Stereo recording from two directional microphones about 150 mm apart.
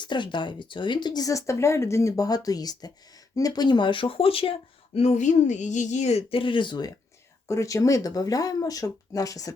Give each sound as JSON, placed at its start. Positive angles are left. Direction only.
{"t": 0.0, "sound": "speech", "side_deg": 30}
{"t": 4.9, "sound": "speech", "side_deg": 50}